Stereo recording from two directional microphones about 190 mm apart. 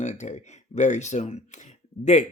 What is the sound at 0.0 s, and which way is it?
Speech, 40° left (ahead or behind).